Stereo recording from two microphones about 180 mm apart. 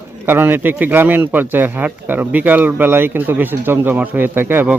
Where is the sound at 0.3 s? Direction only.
10° right (ahead or behind).